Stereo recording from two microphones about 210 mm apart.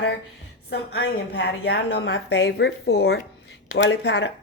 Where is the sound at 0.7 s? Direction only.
50° left (ahead or behind).